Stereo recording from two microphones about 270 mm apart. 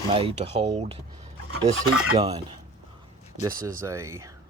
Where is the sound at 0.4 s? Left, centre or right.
Right.